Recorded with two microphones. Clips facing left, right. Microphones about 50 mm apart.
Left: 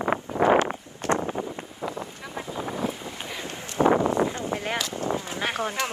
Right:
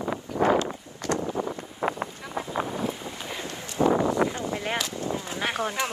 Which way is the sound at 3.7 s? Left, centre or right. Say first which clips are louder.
Left 2 dB; left.